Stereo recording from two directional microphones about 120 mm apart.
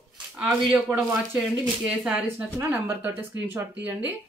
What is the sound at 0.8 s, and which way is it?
Speech, 5° right (ahead or behind).